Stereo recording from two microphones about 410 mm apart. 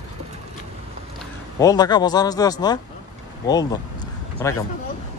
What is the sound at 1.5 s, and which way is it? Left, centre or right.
Speech, centre.